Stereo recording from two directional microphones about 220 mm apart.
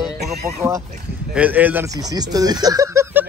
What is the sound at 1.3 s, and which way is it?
Speech, 5° right (ahead or behind).